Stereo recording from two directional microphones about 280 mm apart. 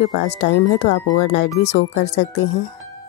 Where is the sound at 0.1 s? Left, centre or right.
Left.